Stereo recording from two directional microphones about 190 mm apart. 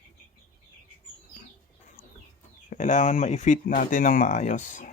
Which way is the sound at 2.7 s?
40° left (ahead or behind).